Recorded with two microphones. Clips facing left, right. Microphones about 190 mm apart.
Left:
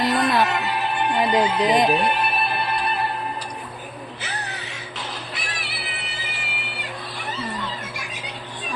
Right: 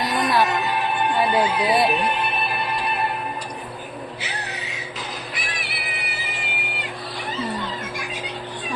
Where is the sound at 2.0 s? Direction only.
5° left (ahead or behind).